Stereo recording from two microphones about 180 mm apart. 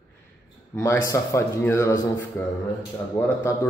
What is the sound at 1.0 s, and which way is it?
A man's voice, 15° left (ahead or behind).